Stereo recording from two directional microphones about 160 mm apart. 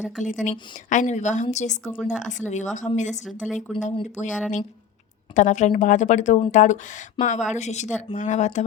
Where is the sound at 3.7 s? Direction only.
50° left (ahead or behind).